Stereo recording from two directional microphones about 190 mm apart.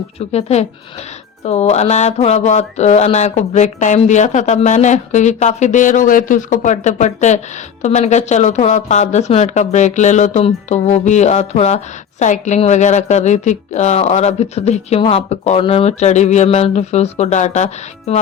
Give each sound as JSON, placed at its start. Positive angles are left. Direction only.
{"t": 0.3, "sound": "speech", "side_deg": 35}